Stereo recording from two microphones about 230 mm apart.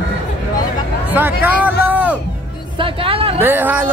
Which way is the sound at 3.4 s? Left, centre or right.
Centre.